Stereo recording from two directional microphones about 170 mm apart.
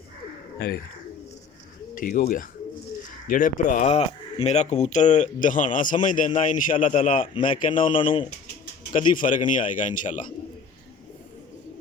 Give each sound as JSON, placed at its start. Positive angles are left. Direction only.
{"t": 2.0, "sound": "speech", "side_deg": 55}
{"t": 7.9, "sound": "speech", "side_deg": 30}
{"t": 8.9, "sound": "speech", "side_deg": 50}